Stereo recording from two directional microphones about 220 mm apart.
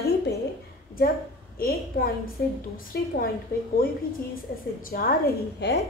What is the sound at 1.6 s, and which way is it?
A woman's voice, 40° left (ahead or behind).